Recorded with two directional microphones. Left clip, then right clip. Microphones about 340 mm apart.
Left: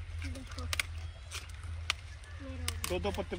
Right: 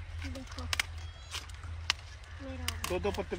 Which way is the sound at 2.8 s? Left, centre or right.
Centre.